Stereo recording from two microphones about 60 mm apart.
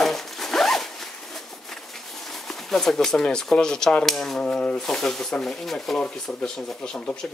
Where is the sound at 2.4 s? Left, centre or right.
Centre.